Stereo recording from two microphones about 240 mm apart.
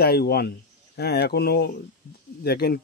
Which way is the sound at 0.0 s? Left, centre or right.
Left.